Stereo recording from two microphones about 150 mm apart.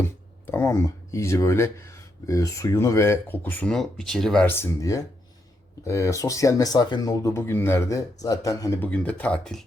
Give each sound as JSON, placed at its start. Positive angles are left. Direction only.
{"t": 0.4, "sound": "speech", "side_deg": 15}
{"t": 4.4, "sound": "speech", "side_deg": 15}